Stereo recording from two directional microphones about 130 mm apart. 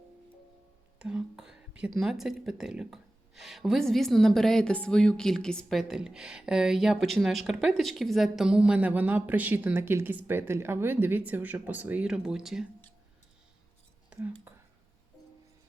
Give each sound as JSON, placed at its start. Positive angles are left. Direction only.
{"t": 0.9, "sound": "speech", "side_deg": -5}